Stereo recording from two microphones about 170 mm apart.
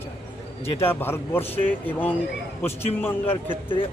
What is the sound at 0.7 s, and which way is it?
Speech, 15° left (ahead or behind).